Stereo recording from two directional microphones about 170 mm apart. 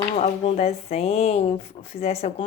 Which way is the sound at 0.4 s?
40° left (ahead or behind).